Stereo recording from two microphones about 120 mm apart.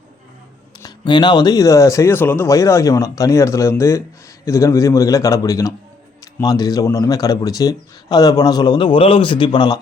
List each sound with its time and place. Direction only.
0.8 s speech: 35° left (ahead or behind)